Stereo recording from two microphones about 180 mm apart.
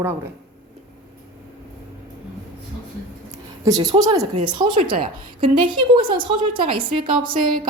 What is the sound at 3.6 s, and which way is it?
A woman's voice, 20° right (ahead or behind).